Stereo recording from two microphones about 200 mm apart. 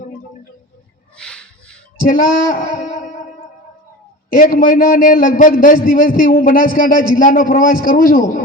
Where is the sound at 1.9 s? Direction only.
45° left (ahead or behind).